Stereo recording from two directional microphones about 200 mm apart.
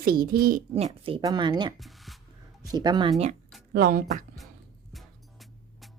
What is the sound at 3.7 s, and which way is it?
Speech, 50° right (ahead or behind).